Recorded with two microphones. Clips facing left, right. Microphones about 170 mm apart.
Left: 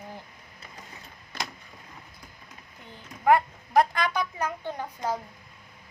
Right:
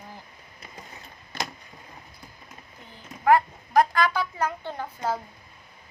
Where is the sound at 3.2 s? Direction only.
20° left (ahead or behind).